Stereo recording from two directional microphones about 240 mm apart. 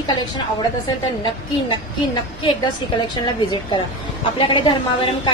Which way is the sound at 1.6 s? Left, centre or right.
Centre.